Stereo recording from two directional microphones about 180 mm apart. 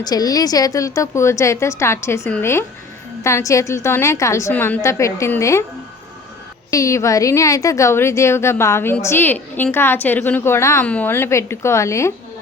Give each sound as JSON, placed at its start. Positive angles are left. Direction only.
{"t": 0.0, "sound": "a woman's voice", "side_deg": 20}
{"t": 6.7, "sound": "a woman's voice", "side_deg": 15}